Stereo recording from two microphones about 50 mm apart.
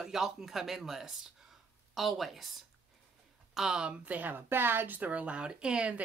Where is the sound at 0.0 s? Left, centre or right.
Centre.